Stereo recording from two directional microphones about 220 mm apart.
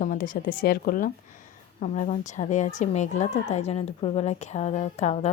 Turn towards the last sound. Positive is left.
turn(degrees=30)  # may be behind; listen again after turning